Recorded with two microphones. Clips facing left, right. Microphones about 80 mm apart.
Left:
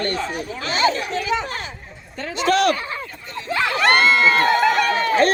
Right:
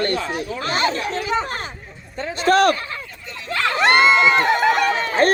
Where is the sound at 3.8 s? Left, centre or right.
Right.